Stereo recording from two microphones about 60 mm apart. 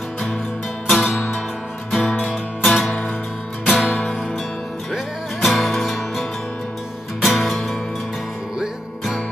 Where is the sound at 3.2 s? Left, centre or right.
Centre.